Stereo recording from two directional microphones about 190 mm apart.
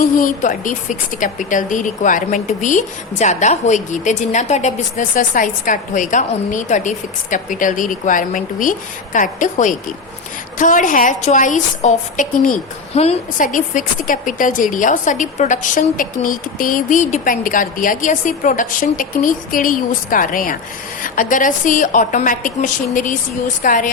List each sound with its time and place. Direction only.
0.0 s a woman's voice: 45° left (ahead or behind)